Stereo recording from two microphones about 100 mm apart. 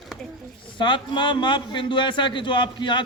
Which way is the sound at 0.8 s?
55° left (ahead or behind).